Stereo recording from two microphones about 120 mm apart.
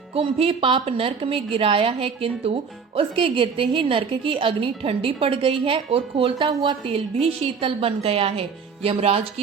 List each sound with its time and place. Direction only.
0.1 s a woman's voice: 50° right (ahead or behind)